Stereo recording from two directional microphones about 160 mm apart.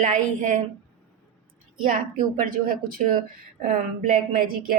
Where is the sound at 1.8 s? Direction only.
55° right (ahead or behind).